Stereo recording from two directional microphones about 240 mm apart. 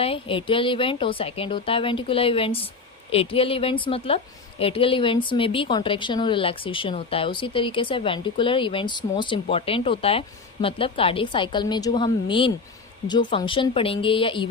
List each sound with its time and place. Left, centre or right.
0.0 s a woman's voice: left